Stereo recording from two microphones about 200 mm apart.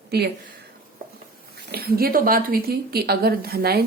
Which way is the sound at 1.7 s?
50° right (ahead or behind).